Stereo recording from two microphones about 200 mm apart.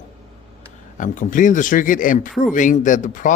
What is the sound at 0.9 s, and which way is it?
A man's voice, 40° left (ahead or behind).